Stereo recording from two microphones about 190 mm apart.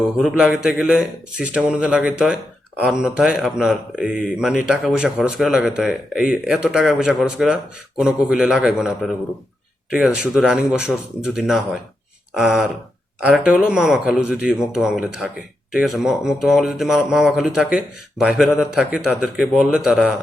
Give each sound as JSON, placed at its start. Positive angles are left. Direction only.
{"t": 0.2, "sound": "speech", "side_deg": -5}